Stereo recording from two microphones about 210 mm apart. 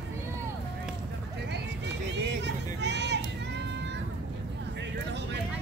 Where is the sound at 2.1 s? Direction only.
55° right (ahead or behind).